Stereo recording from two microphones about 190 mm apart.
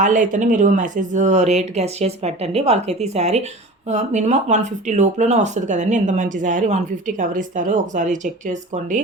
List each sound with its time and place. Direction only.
0.0 s speech: 40° right (ahead or behind)